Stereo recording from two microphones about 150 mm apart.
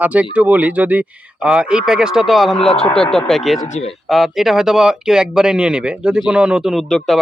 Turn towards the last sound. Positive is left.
turn(degrees=0)  # may be behind; listen again after turning